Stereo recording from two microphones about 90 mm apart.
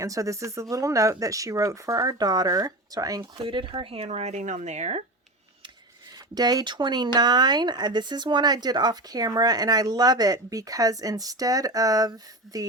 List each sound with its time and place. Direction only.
0.0 s speech: 35° right (ahead or behind)
3.4 s speech: 70° right (ahead or behind)
6.1 s speech: 45° right (ahead or behind)